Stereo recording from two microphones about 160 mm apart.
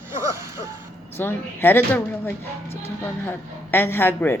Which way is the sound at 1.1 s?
15° left (ahead or behind).